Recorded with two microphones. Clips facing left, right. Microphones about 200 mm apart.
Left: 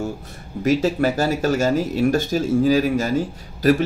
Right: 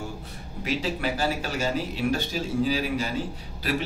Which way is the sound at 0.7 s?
45° left (ahead or behind).